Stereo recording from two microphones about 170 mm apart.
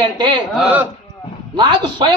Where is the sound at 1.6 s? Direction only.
25° right (ahead or behind).